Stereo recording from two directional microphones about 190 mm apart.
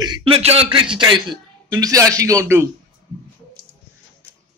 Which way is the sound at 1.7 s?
20° right (ahead or behind).